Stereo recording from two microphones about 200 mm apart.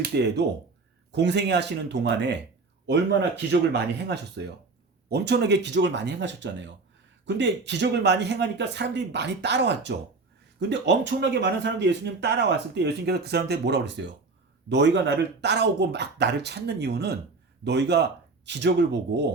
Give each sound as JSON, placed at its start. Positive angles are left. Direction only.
{"t": 0.1, "sound": "speech", "side_deg": -55}